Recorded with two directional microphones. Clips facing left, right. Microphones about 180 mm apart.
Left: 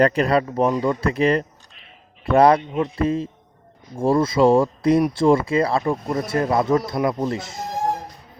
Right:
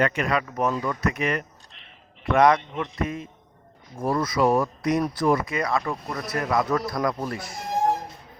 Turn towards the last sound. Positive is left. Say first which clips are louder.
# left 6 dB
turn(degrees=25)  # may be behind; listen again after turning